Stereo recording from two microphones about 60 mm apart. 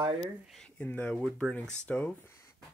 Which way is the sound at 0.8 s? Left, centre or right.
Left.